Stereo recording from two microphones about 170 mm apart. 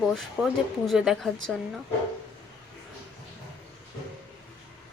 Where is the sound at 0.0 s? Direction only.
Centre (ahead or behind).